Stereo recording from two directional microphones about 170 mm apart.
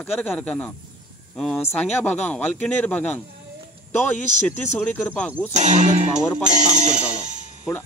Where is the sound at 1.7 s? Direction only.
10° left (ahead or behind).